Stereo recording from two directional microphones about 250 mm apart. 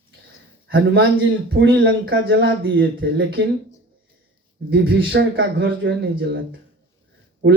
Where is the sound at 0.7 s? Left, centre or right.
Right.